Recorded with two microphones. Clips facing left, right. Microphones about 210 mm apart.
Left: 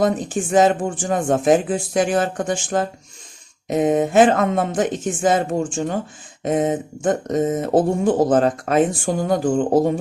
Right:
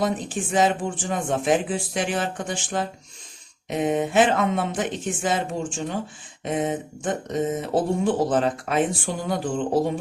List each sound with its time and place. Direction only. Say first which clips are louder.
0.0 s speech: left 5 dB; 45° left (ahead or behind)